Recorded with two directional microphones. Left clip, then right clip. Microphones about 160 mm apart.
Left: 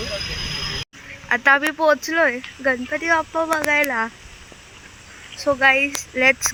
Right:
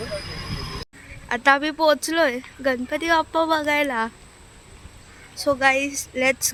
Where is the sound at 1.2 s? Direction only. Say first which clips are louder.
Left 2 dB; 20° right (ahead or behind).